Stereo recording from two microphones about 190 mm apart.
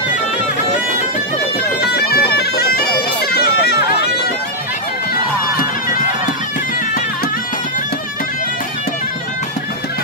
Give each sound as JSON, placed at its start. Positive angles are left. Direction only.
{"t": 1.6, "sound": "bagpipes", "side_deg": 60}